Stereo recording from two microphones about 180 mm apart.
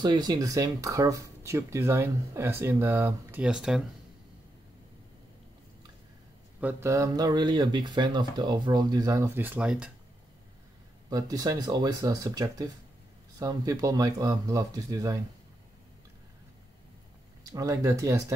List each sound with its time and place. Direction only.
0.0 s speech: 25° right (ahead or behind); by 3.8 s 5° right (ahead or behind)
6.6 s speech: 15° right (ahead or behind)
11.1 s speech: 20° right (ahead or behind)
17.4 s speech: 20° right (ahead or behind)